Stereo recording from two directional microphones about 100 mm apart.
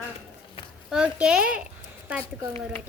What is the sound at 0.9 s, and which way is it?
Speech, 10° right (ahead or behind).